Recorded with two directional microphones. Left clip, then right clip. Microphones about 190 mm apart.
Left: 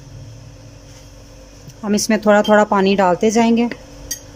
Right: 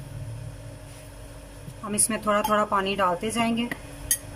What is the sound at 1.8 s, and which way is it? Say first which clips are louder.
A woman's voice: left 11 dB; 35° left (ahead or behind).